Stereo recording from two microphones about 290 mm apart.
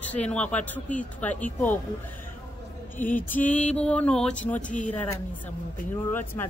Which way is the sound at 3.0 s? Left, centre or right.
Centre.